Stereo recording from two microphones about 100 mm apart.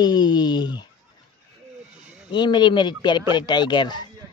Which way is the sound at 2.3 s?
50° left (ahead or behind).